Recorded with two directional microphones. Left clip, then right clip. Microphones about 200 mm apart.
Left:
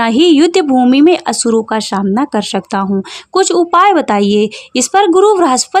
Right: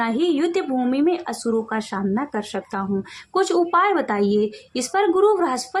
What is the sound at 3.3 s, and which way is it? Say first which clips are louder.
Speech: left 9 dB; 35° left (ahead or behind).